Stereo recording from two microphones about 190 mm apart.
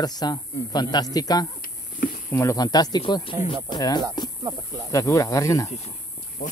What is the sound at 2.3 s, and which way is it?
Speech, 15° left (ahead or behind).